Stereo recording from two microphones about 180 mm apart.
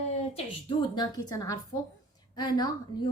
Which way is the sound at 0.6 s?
25° left (ahead or behind).